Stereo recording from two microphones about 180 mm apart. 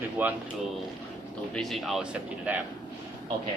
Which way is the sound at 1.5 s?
Centre (ahead or behind).